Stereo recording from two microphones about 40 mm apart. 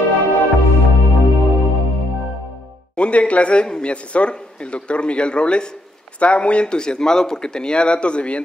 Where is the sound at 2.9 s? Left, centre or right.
Left.